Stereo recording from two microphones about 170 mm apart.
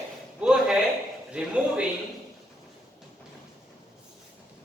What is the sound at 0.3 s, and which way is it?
A man's voice, 5° right (ahead or behind).